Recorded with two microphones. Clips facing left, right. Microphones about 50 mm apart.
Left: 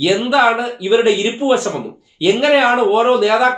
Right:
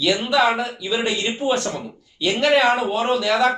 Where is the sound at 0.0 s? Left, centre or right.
Centre.